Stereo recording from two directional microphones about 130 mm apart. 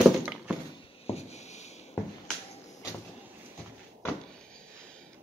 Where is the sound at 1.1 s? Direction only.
55° left (ahead or behind).